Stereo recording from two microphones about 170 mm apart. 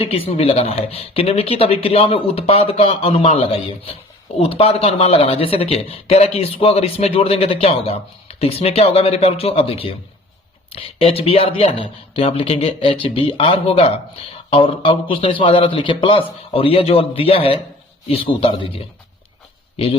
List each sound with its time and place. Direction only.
0.0 s speech: 35° left (ahead or behind)